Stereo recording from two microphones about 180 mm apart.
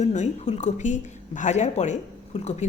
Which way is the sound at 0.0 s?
40° left (ahead or behind).